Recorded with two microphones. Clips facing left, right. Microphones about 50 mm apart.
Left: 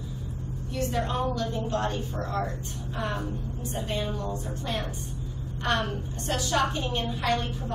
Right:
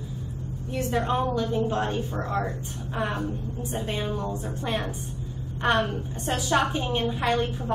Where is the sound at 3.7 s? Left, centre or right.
Centre.